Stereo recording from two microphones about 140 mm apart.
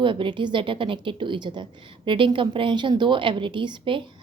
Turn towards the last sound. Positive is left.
turn(degrees=-35)  # may be behind; listen again after turning